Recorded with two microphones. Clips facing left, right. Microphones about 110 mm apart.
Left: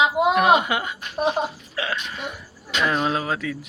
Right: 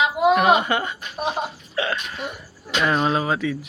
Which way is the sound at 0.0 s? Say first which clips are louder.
Right 1 dB; 20° left (ahead or behind).